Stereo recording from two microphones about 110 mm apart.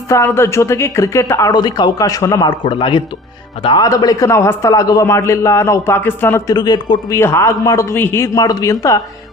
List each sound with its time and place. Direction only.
0.1 s speech: 25° left (ahead or behind); by 3.0 s 50° left (ahead or behind)
3.8 s a man's voice: 35° left (ahead or behind)
6.5 s a man's voice: 40° left (ahead or behind)
7.1 s a man's voice: 25° left (ahead or behind)